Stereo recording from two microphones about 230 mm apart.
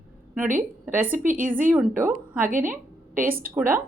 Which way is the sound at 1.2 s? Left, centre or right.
Right.